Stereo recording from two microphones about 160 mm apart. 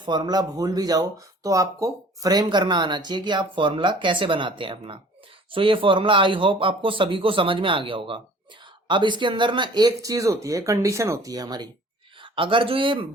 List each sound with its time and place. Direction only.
0.0 s speech: 25° right (ahead or behind)